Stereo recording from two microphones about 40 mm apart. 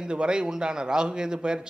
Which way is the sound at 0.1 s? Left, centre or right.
Right.